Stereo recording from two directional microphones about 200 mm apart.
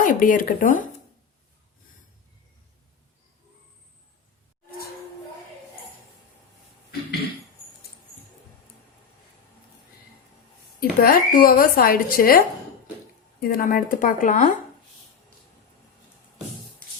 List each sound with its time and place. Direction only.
0.0 s speech: 45° left (ahead or behind)
10.8 s speech: 45° left (ahead or behind)
13.4 s speech: 45° left (ahead or behind)